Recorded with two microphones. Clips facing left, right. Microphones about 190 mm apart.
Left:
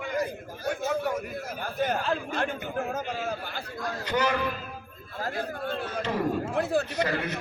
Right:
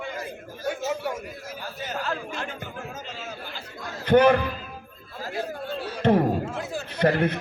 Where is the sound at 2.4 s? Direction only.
55° left (ahead or behind).